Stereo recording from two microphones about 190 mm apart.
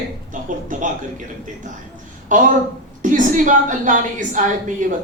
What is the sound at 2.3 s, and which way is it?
A woman's voice, 45° right (ahead or behind).